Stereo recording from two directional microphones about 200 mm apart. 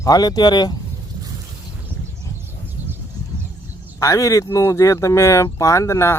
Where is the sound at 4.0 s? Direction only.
15° left (ahead or behind).